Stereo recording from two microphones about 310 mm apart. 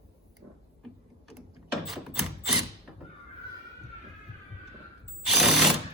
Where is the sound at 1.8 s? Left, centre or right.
Centre.